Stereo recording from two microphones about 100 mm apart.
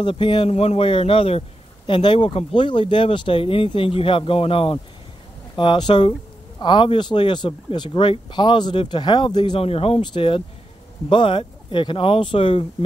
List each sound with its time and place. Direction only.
0.0 s speech: 55° left (ahead or behind)
0.5 s a man's voice: 85° left
1.9 s speech: 55° left (ahead or behind)
5.6 s speech: 55° left (ahead or behind)
9.6 s a man's voice: 75° left (ahead or behind)
10.1 s speech: 60° left (ahead or behind)